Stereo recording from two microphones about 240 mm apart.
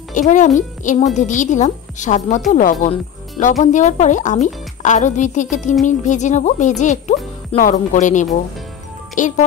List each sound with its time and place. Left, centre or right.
0.1 s a child's voice: left
9.2 s music: left